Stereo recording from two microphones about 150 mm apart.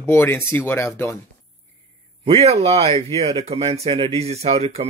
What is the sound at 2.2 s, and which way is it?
Speech, 40° right (ahead or behind).